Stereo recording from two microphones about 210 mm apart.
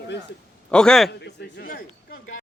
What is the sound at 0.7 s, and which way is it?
Speech, 5° left (ahead or behind).